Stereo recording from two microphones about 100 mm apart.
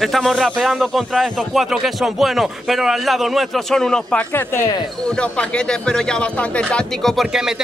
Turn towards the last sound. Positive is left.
turn(degrees=-5)  # may be behind; listen again after turning